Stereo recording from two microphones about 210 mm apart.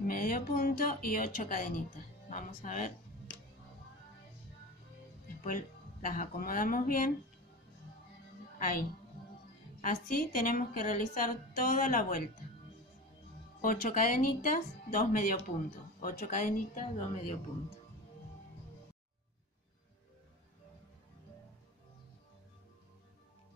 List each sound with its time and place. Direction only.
0.0 s speech: 45° left (ahead or behind)
6.0 s a woman's voice: 40° left (ahead or behind)
8.5 s a woman's voice: 40° left (ahead or behind)
13.6 s a woman's voice: 40° left (ahead or behind)